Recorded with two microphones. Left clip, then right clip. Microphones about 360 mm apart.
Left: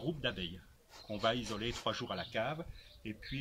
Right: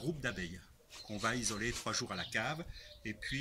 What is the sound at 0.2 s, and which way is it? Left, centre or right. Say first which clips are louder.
Speech: left 2 dB; centre.